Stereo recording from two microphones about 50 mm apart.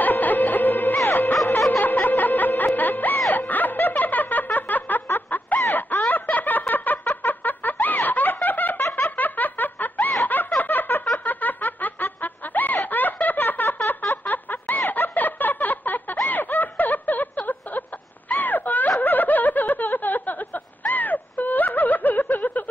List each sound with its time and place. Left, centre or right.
0.0 s music: left
0.9 s music: left
1.7 s music: left
3.3 s snicker: left
5.7 s a sound: left
6.7 s snicker: left
8.8 s snicker: left
9.1 s snicker: left
10.6 s a sound: left
11.1 s snicker: left
14.1 s a sound: left
16.3 s snicker: left
17.5 s a sound: left
18.9 s snicker: left